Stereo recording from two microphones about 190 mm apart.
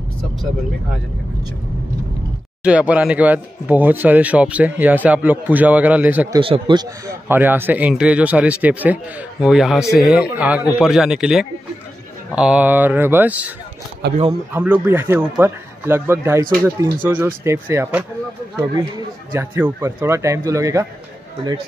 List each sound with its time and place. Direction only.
2.6 s a man's voice: 5° right (ahead or behind)
6.3 s a man's voice: 25° right (ahead or behind)
7.2 s a man's voice: 10° right (ahead or behind)
14.0 s speech: 60° right (ahead or behind)
14.5 s a man's voice: 10° right (ahead or behind)